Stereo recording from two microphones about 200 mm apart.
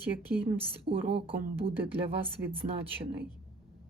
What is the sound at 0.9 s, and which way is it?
Speech, 55° right (ahead or behind).